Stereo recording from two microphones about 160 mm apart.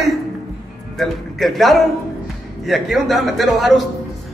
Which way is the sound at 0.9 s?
Centre (ahead or behind).